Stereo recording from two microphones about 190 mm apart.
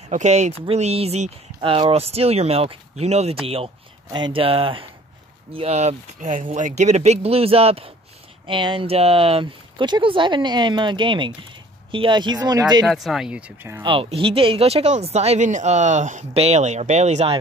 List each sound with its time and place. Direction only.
0.1 s speech: 35° right (ahead or behind); by 12.8 s 20° right (ahead or behind)
12.8 s speech: centre (ahead or behind)
13.8 s speech: 25° right (ahead or behind)